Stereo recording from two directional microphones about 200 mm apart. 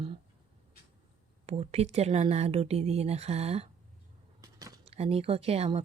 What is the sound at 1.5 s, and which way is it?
Speech, 30° right (ahead or behind).